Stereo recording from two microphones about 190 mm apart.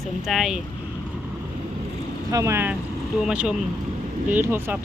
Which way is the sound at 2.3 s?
15° right (ahead or behind).